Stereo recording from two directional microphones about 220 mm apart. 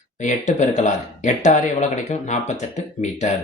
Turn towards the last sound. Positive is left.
turn(degrees=35)  # may be behind; listen again after turning